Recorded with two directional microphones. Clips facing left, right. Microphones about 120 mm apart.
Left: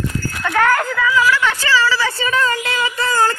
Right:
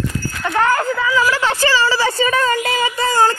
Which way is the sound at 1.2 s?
35° right (ahead or behind).